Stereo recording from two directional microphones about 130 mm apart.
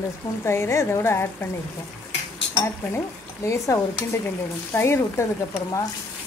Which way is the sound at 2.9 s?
25° left (ahead or behind).